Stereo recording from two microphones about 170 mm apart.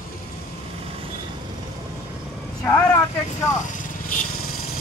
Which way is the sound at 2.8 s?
15° left (ahead or behind).